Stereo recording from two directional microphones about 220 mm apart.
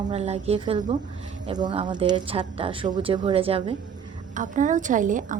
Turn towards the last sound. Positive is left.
turn(degrees=-35)  # may be behind; listen again after turning